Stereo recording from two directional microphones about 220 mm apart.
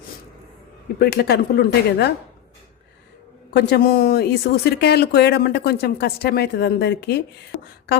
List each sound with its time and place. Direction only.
0.9 s speech: 45° left (ahead or behind)
3.5 s speech: 50° left (ahead or behind)